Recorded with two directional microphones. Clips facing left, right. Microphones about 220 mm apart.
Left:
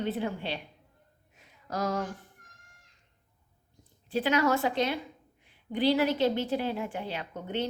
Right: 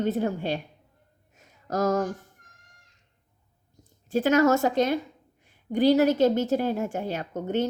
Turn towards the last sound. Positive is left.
turn(degrees=-45)  # may be behind; listen again after turning